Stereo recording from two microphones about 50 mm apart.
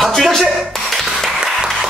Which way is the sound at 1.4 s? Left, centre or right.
Centre.